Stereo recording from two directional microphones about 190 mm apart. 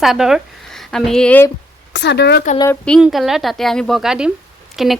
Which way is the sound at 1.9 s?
65° left (ahead or behind).